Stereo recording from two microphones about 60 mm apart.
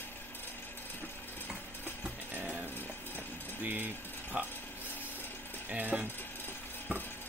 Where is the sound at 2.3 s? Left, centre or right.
Right.